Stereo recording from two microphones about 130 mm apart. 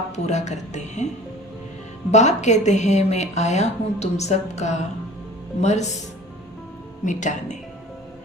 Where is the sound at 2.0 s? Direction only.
60° left (ahead or behind).